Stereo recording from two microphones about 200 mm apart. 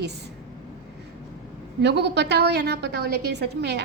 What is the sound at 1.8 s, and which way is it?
A woman's voice, 60° right (ahead or behind).